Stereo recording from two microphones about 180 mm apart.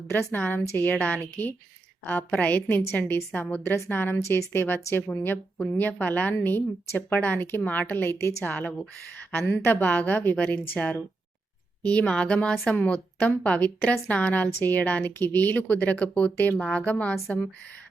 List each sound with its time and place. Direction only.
0.1 s a woman's voice: 10° left (ahead or behind)